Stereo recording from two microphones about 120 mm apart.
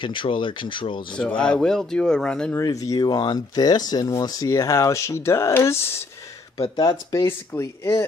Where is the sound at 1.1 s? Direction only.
10° left (ahead or behind).